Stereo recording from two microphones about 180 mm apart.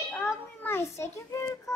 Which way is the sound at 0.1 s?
10° left (ahead or behind).